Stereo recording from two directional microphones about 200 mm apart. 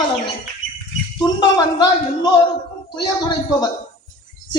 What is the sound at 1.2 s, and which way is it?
A man's voice, 20° left (ahead or behind).